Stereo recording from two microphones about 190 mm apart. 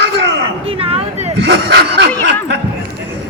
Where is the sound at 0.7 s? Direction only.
30° right (ahead or behind).